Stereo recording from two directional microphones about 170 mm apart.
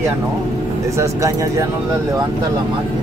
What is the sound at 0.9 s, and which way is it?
Speech, 20° right (ahead or behind).